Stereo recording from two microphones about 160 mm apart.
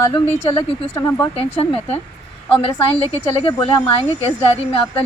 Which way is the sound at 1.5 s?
40° left (ahead or behind).